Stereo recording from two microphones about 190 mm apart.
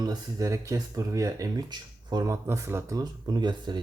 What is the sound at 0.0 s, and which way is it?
Speech, 20° right (ahead or behind).